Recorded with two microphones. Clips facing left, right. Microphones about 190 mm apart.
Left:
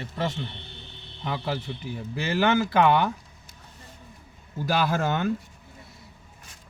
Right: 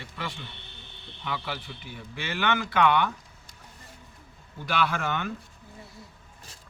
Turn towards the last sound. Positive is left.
turn(degrees=40)  # may be behind; listen again after turning